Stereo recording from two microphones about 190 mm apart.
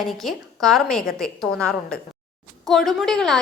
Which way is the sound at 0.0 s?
Centre (ahead or behind).